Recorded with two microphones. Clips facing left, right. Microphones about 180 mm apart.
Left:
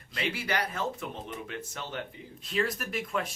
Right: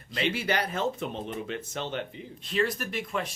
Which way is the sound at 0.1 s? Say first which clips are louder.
Right 4 dB; 25° right (ahead or behind).